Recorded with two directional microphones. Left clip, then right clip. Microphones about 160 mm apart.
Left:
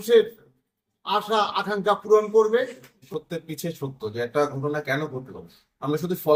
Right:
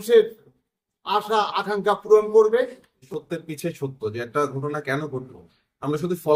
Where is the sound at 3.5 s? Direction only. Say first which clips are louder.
Right 3 dB; 30° right (ahead or behind).